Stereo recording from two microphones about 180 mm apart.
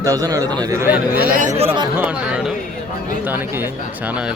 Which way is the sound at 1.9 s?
5° right (ahead or behind).